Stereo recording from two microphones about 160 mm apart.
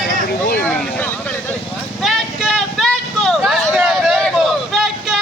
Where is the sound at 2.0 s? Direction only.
Centre (ahead or behind).